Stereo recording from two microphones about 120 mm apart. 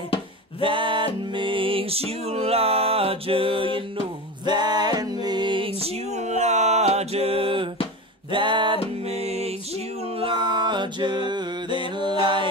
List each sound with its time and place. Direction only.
0.6 s music: 45° right (ahead or behind)
4.5 s music: 35° right (ahead or behind)
5.8 s music: 65° right (ahead or behind); by 8.7 s 40° right (ahead or behind)
9.0 s music: 60° right (ahead or behind)
10.1 s music: 45° right (ahead or behind)